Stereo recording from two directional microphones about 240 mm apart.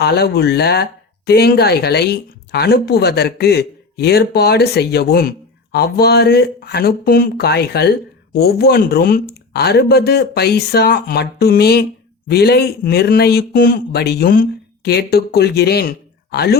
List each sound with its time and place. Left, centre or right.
0.0 s speech: left